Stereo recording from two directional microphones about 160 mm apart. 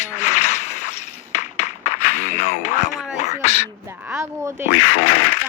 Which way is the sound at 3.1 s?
45° left (ahead or behind).